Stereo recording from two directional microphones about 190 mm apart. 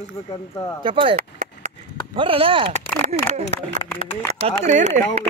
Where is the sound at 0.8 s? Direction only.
25° right (ahead or behind).